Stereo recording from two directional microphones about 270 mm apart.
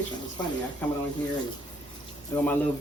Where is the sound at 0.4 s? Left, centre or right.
Centre.